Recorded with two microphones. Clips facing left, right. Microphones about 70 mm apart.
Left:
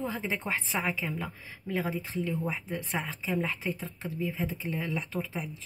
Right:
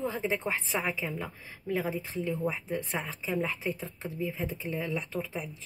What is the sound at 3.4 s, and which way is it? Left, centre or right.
Speech, right.